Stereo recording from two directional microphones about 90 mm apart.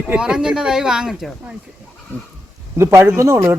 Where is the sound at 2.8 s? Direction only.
30° right (ahead or behind).